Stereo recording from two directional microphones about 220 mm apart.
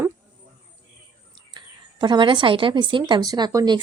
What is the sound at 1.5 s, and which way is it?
Speech, 20° right (ahead or behind).